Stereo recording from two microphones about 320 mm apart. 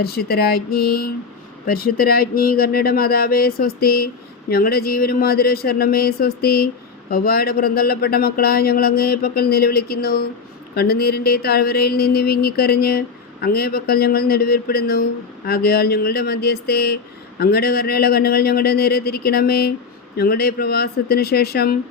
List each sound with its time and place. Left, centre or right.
0.0 s speech: left